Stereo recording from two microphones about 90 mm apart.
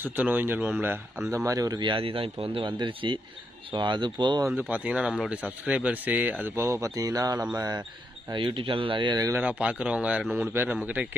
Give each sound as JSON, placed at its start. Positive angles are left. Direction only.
{"t": 0.0, "sound": "speech", "side_deg": -20}
{"t": 1.5, "sound": "speech", "side_deg": -40}
{"t": 1.8, "sound": "speech", "side_deg": -80}
{"t": 4.5, "sound": "speech", "side_deg": -15}
{"t": 6.4, "sound": "speech", "side_deg": -30}
{"t": 8.3, "sound": "speech", "side_deg": -80}
{"t": 9.4, "sound": "speech", "side_deg": -15}
{"t": 10.2, "sound": "a man's voice", "side_deg": 0}
{"t": 10.5, "sound": "speech", "side_deg": -20}